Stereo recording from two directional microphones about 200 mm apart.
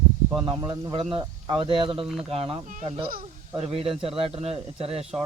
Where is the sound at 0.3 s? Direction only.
25° right (ahead or behind).